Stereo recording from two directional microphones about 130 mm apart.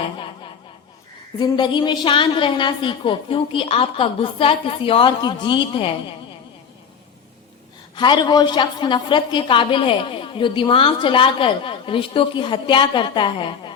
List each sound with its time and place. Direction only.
0.0 s snicker: 40° left (ahead or behind)
1.4 s a woman's voice: 35° left (ahead or behind)
7.9 s a woman's voice: 35° left (ahead or behind)